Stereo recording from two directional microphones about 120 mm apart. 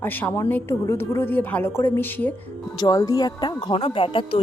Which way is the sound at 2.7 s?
35° left (ahead or behind).